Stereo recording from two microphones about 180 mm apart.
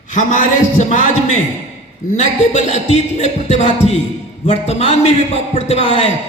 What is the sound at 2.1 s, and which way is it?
Speech, 40° left (ahead or behind).